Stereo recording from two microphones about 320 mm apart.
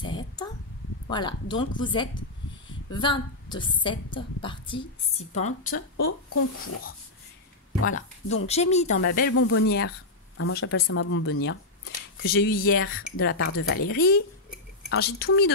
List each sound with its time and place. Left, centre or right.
0.0 s a sound: centre
1.0 s a woman's voice: centre
5.7 s speech: left
6.3 s speech: left
7.8 s speech: left
9.3 s speech: left
13.9 s speech: left